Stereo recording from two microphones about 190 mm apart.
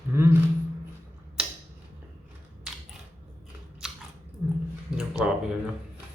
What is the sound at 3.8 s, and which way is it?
Biting, centre (ahead or behind).